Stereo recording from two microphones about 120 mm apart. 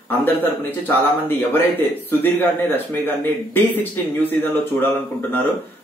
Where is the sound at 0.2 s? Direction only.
15° left (ahead or behind).